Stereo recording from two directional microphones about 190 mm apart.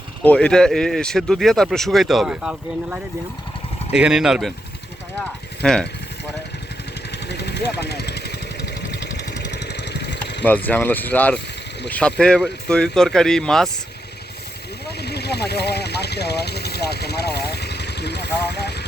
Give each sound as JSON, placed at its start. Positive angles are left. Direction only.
{"t": 0.2, "sound": "speech", "side_deg": 5}
{"t": 7.1, "sound": "vehicle", "side_deg": 65}
{"t": 10.4, "sound": "speech", "side_deg": 10}
{"t": 14.8, "sound": "speech", "side_deg": 60}